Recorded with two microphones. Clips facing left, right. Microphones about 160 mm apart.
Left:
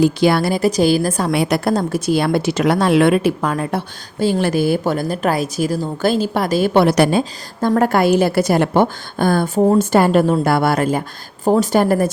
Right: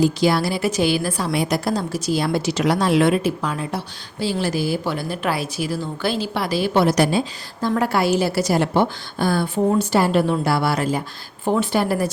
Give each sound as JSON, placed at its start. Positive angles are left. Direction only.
{"t": 0.0, "sound": "a woman's voice", "side_deg": 60}
{"t": 0.6, "sound": "a woman's voice", "side_deg": 40}
{"t": 1.3, "sound": "speech", "side_deg": 65}
{"t": 6.8, "sound": "a woman's voice", "side_deg": 60}
{"t": 11.4, "sound": "speech", "side_deg": 40}